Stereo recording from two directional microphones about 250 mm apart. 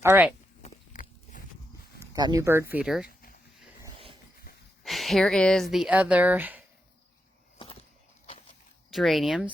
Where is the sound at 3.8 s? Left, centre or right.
Right.